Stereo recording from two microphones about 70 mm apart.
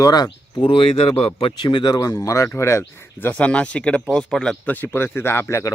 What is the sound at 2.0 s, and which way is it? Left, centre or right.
Speech, left.